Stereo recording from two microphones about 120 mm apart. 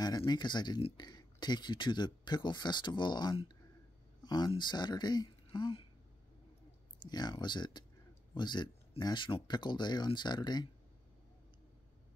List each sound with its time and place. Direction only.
0.0 s speech: 30° left (ahead or behind)
4.2 s a sound: 35° left (ahead or behind)
4.5 s speech: 40° left (ahead or behind)
7.0 s speech: 35° left (ahead or behind)